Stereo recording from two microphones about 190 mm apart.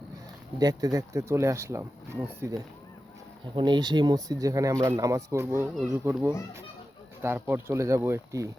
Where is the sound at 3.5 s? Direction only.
25° right (ahead or behind).